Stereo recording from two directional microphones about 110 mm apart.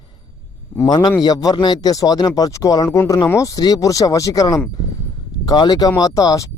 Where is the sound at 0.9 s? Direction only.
40° left (ahead or behind).